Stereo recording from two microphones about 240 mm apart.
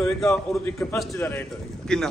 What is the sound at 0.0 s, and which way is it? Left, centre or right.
A man's voice, centre.